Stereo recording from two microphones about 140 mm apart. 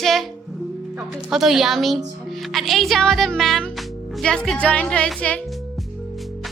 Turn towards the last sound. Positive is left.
turn(degrees=10)  # may be behind; listen again after turning